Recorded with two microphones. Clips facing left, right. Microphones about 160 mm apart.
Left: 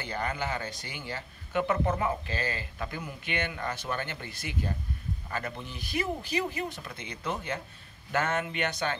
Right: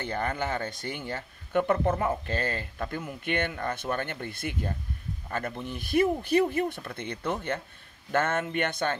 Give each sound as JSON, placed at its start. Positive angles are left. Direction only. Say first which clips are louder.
{"t": 0.0, "sound": "speech", "louder": "right 3 dB", "side_deg": -50}